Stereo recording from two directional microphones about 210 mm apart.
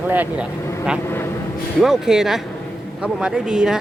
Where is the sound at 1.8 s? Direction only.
Centre (ahead or behind).